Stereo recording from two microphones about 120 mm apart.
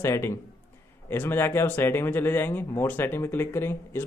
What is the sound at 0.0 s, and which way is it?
A man's voice, 20° left (ahead or behind).